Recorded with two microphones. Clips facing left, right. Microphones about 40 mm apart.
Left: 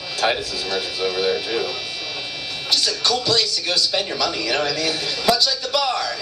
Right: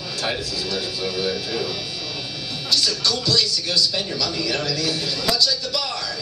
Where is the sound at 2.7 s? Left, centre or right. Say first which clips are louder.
Left 1 dB; left.